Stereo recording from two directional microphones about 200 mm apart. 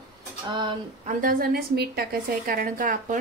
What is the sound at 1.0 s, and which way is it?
Speech, 45° right (ahead or behind).